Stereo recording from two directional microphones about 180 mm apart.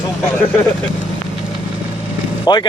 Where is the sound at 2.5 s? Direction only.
25° left (ahead or behind).